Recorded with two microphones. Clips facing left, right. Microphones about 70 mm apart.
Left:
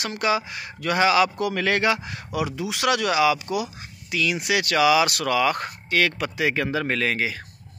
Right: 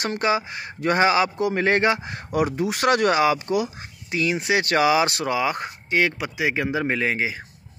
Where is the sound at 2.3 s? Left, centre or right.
Right.